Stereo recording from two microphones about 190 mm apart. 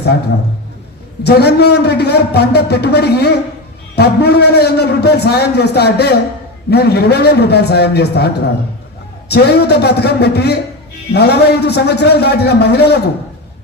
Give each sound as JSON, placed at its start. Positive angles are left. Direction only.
{"t": 1.2, "sound": "a man's voice", "side_deg": 60}